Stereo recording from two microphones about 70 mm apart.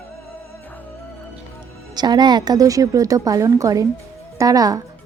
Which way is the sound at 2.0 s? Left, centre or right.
Right.